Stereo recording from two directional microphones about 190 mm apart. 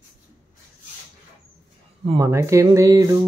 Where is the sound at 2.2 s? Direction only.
15° right (ahead or behind).